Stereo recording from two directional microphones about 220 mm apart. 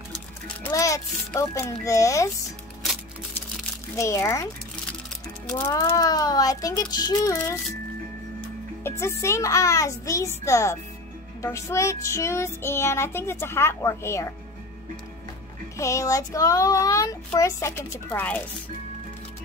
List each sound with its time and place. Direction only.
0.7 s child singing: 15° left (ahead or behind)
3.9 s a child's voice: 15° left (ahead or behind)
5.5 s child singing: 15° left (ahead or behind)
8.8 s music: 10° left (ahead or behind)
9.2 s child singing: 15° left (ahead or behind)
15.8 s child singing: 15° left (ahead or behind)